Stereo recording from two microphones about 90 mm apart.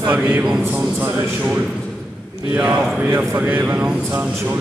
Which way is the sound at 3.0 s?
15° right (ahead or behind).